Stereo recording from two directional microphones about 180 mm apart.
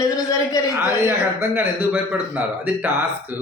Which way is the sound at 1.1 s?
10° right (ahead or behind).